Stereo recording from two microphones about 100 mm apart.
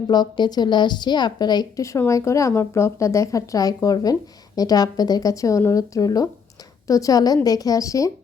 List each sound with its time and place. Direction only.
0.1 s a woman's voice: 45° left (ahead or behind)